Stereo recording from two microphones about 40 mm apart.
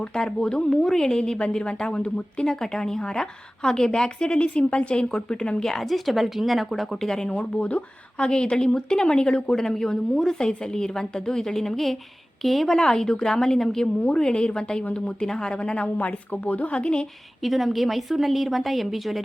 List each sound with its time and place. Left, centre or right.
0.0 s a woman's voice: left
2.5 s a woman's voice: centre
5.8 s a woman's voice: centre
7.3 s a woman's voice: left; by 12.7 s centre
12.7 s a woman's voice: centre
16.0 s a woman's voice: left
17.4 s a woman's voice: centre